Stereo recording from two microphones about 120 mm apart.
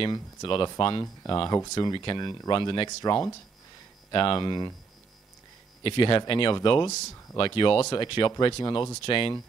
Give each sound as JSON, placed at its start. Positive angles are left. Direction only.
{"t": 0.0, "sound": "speech", "side_deg": 40}
{"t": 1.0, "sound": "speech", "side_deg": 30}
{"t": 5.9, "sound": "speech", "side_deg": 45}